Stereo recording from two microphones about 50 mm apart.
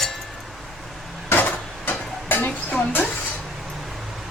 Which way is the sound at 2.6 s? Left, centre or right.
Left.